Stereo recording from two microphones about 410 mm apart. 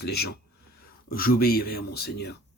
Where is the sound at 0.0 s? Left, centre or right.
Left.